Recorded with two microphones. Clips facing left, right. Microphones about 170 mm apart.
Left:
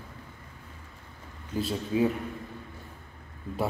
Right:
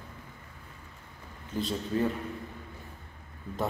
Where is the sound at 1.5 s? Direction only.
5° left (ahead or behind).